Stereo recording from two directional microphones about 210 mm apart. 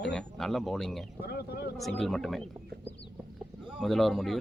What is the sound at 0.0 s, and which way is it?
Speech, 5° left (ahead or behind).